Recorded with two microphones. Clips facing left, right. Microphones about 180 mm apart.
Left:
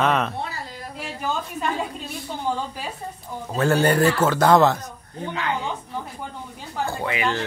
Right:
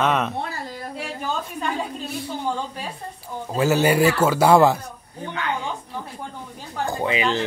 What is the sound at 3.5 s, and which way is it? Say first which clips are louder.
A man's voice: right 1 dB; 5° right (ahead or behind).